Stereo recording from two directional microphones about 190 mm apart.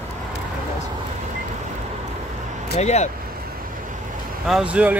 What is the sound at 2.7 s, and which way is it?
Speech, 35° left (ahead or behind).